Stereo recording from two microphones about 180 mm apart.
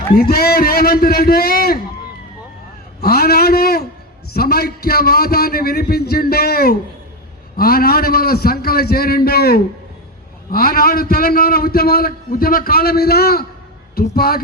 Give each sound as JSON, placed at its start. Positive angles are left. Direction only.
{"t": 0.1, "sound": "a man's voice", "side_deg": 60}
{"t": 3.0, "sound": "a man's voice", "side_deg": 60}